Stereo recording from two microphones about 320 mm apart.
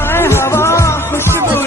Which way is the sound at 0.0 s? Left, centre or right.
Centre.